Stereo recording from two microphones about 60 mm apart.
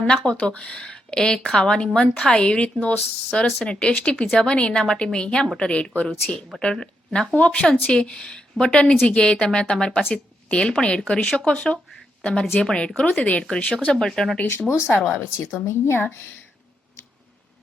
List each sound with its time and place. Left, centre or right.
0.3 s a woman's voice: centre
6.1 s speech: centre
6.6 s a woman's voice: centre
14.5 s speech: left